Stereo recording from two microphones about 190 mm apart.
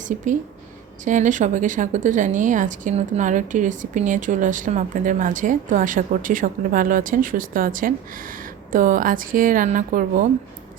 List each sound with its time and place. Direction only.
0.0 s a woman's voice: 40° right (ahead or behind)